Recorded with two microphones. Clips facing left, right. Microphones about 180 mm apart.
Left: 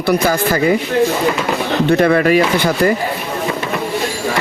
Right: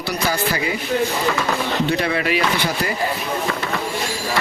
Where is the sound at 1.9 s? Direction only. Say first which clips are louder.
Left 9 dB; 50° left (ahead or behind).